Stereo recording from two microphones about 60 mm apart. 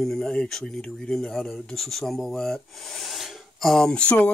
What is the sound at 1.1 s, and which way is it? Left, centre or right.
Speech, centre.